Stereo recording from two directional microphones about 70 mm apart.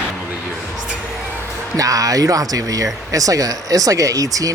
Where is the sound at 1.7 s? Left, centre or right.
Right.